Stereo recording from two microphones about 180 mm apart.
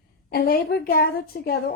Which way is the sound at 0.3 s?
55° left (ahead or behind).